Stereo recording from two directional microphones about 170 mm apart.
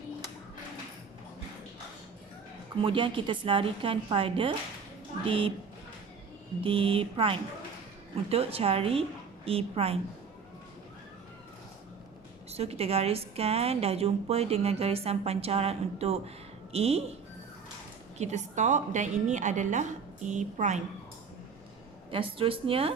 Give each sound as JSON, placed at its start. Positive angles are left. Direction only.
{"t": 2.8, "sound": "a woman's voice", "side_deg": -30}
{"t": 6.6, "sound": "a woman's voice", "side_deg": -30}
{"t": 12.5, "sound": "a woman's voice", "side_deg": -35}
{"t": 18.2, "sound": "a woman's voice", "side_deg": -45}
{"t": 22.1, "sound": "a woman's voice", "side_deg": -30}